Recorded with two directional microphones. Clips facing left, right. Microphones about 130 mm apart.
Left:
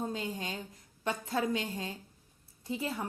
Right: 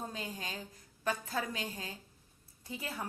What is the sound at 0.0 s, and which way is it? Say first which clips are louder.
A woman's voice: left 5 dB; 25° left (ahead or behind).